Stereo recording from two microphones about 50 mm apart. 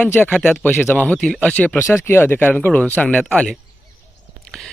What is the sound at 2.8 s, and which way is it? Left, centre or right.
Speech, left.